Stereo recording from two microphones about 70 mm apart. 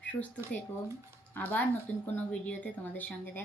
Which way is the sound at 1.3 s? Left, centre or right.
Left.